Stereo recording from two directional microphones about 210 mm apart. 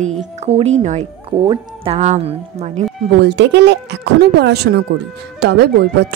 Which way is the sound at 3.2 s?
55° right (ahead or behind).